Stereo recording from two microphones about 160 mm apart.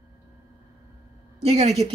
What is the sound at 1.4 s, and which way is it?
Speech, 40° right (ahead or behind).